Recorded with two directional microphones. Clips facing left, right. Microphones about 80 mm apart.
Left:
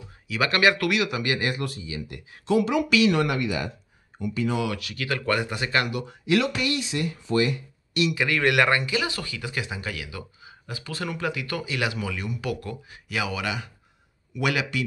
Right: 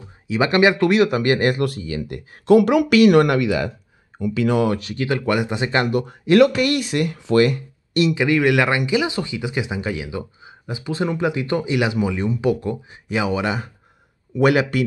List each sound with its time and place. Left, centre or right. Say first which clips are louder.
0.3 s speech: right 5 dB; right
0.8 s speech: right 9 dB; right
1.6 s speech: right 9 dB; right
4.6 s speech: right 8 dB; right
5.9 s speech: right 7 dB; right
8.1 s speech: right 7 dB; centre
8.5 s speech: right 4 dB; centre; by 14.9 s right